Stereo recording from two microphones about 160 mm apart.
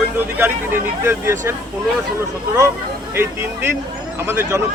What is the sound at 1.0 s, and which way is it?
Speech, 15° right (ahead or behind).